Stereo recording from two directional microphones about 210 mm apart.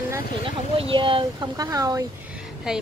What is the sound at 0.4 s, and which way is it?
Speech, 25° right (ahead or behind).